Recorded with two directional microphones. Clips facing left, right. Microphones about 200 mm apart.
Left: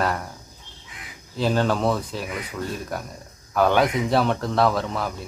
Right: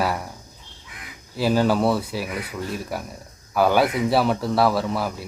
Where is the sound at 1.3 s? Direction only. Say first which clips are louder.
Right 2 dB; 10° right (ahead or behind).